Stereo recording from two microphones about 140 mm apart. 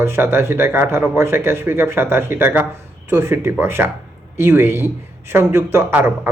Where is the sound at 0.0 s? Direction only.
15° right (ahead or behind).